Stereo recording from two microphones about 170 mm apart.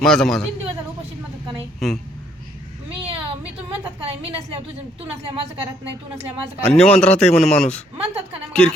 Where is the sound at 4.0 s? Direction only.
35° right (ahead or behind).